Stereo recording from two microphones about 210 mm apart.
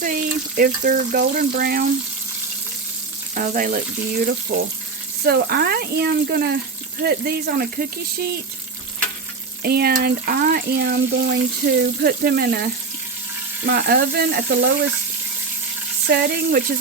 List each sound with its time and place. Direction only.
0.0 s speech: 40° right (ahead or behind)
3.3 s frying: 40° right (ahead or behind)
4.5 s speech: 45° right (ahead or behind)
9.6 s speech: 50° right (ahead or behind)
16.0 s speech: 50° right (ahead or behind)